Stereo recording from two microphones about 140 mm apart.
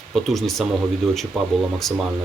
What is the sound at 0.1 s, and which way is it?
Speech, centre (ahead or behind).